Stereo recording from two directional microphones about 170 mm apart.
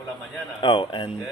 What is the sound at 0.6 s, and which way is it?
Speech, 30° left (ahead or behind).